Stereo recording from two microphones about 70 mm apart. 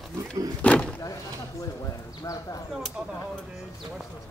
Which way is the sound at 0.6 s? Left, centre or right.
Centre.